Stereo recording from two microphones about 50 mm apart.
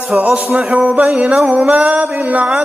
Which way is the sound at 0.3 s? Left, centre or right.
Right.